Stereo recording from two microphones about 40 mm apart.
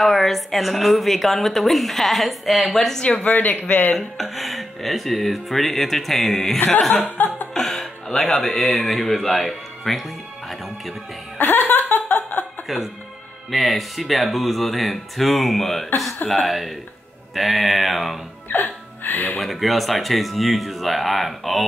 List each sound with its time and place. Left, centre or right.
0.0 s a woman's voice: centre
3.0 s speech: left
3.6 s chuckle: left
4.2 s a woman's voice: centre
7.1 s chuckle: left
7.5 s speech: centre
11.3 s laughter: left
12.6 s a woman's voice: centre
18.5 s music: left
19.4 s a woman's voice: centre